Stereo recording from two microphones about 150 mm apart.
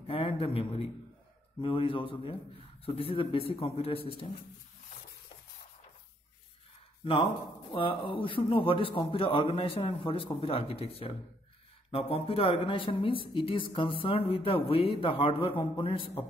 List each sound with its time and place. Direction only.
0.0 s speech: 40° left (ahead or behind)
7.7 s speech: 35° left (ahead or behind)